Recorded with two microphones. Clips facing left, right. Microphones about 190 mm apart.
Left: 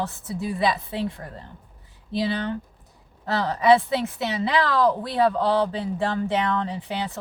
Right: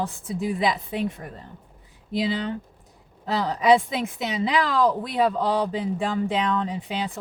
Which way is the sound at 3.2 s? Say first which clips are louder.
Left 1 dB; 15° right (ahead or behind).